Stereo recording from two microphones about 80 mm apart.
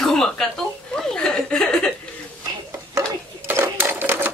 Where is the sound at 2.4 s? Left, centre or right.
Right.